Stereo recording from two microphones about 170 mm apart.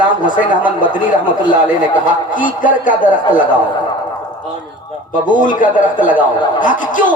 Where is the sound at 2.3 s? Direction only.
50° left (ahead or behind).